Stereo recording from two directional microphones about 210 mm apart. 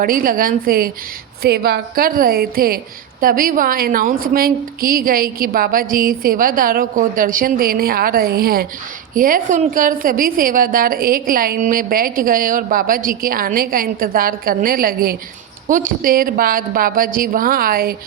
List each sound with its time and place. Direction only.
0.0 s a woman's voice: 40° right (ahead or behind)